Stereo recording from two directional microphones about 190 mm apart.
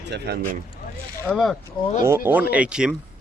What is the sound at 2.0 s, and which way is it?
Speech, 10° right (ahead or behind).